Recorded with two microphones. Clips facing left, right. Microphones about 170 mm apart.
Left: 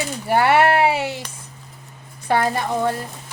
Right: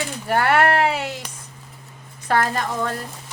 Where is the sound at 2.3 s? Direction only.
10° left (ahead or behind).